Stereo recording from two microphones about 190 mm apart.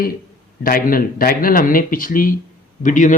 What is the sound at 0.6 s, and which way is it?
Speech, 50° left (ahead or behind).